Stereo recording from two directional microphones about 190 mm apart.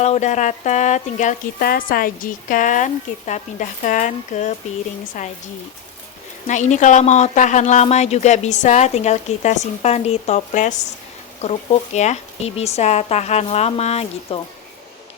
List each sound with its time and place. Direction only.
0.0 s speech: 35° left (ahead or behind)
6.5 s speech: 40° left (ahead or behind)